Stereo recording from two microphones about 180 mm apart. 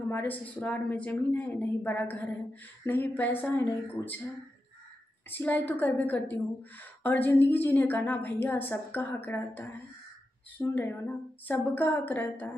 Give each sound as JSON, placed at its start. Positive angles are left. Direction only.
{"t": 0.1, "sound": "a woman's voice", "side_deg": 10}
{"t": 5.3, "sound": "a woman's voice", "side_deg": 10}